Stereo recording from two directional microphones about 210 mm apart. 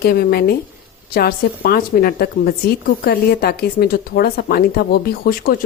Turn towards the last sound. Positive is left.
turn(degrees=45)  # may be behind; listen again after turning